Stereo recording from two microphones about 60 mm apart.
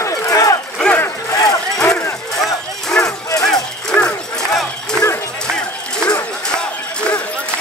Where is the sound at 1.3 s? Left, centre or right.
Left.